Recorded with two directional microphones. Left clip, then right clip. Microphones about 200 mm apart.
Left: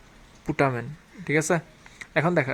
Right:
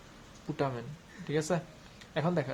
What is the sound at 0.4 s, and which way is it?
Speech, 50° left (ahead or behind).